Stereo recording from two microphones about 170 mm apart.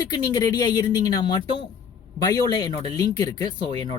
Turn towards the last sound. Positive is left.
turn(degrees=25)  # may be behind; listen again after turning